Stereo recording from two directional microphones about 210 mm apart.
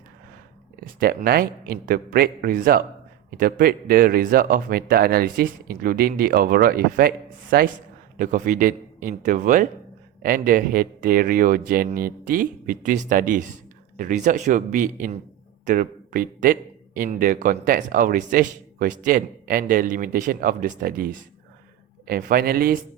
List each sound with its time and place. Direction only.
0.8 s speech: 45° right (ahead or behind)